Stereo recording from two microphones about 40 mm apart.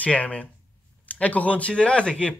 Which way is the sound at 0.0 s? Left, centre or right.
Left.